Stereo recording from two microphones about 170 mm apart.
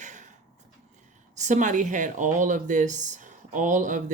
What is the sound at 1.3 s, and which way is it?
Speech, 45° right (ahead or behind).